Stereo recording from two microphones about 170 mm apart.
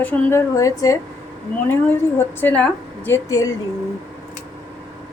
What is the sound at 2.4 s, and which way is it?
A woman's voice, 10° left (ahead or behind).